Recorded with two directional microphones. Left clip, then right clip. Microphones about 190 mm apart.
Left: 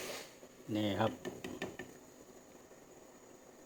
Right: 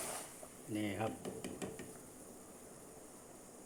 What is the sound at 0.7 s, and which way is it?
Speech, 20° left (ahead or behind).